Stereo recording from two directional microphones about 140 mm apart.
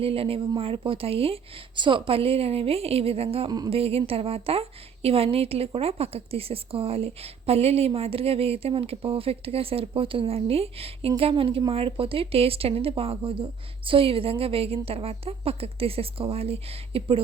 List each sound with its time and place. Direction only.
0.0 s a woman's voice: 40° right (ahead or behind)